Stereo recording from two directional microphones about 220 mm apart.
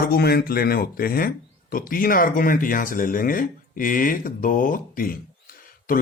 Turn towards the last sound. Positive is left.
turn(degrees=40)  # may be behind; listen again after turning